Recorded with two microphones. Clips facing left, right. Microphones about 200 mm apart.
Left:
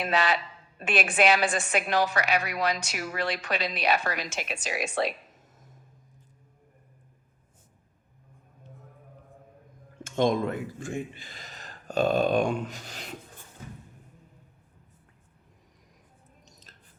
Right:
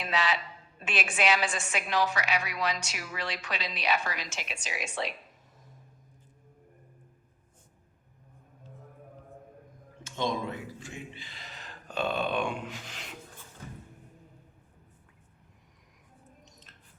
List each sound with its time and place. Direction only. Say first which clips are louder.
0.0 s a woman's voice: left 4 dB; 55° left (ahead or behind)
10.0 s speech: left 7 dB; 50° left (ahead or behind)
16.5 s a sound: left 1 dB; 35° left (ahead or behind)